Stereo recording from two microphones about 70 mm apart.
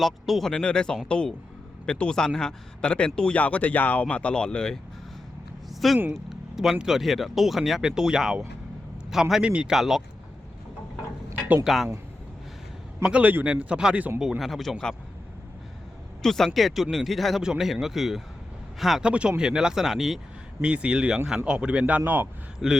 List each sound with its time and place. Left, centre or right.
0.0 s speech: centre
0.5 s speech: centre
5.8 s a man's voice: centre
9.5 s speech: centre
9.7 s speech: centre
11.6 s speech: centre
13.0 s a man's voice: centre
14.2 s speech: centre
16.2 s speech: centre
19.0 s speech: centre
20.6 s speech: centre
22.6 s speech: centre